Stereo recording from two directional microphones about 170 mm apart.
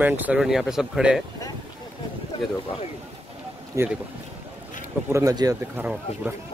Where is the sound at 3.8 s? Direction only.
15° right (ahead or behind).